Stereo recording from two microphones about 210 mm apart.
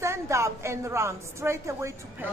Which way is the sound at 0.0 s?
15° right (ahead or behind).